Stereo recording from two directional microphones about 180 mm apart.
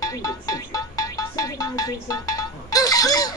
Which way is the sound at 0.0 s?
20° left (ahead or behind).